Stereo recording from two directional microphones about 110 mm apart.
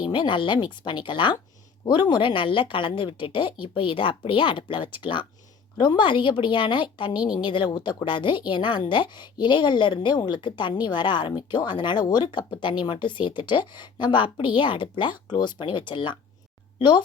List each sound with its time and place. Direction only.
0.0 s a woman's voice: 45° left (ahead or behind)